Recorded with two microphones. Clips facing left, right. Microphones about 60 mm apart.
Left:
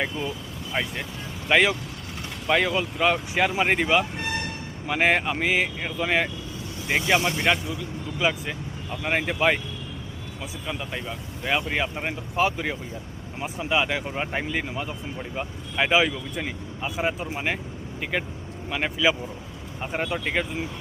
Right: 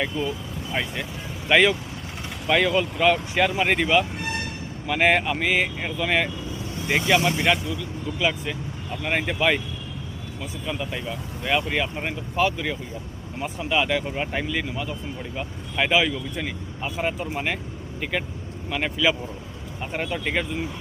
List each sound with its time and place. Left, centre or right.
0.1 s speech: left
0.7 s speech: centre
7.7 s speech: centre
10.4 s speech: centre
14.5 s speech: left
15.9 s speech: centre
16.8 s speech: centre